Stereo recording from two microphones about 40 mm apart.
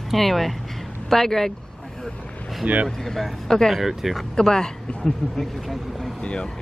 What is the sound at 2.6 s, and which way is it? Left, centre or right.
Speech, right.